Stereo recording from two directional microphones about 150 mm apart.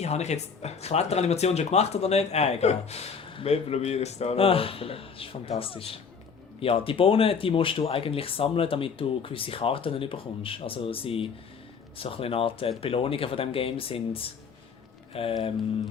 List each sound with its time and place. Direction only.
0.0 s speech: 45° left (ahead or behind)